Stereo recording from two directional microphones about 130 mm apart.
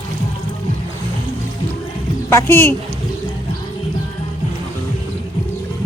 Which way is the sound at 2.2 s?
20° left (ahead or behind).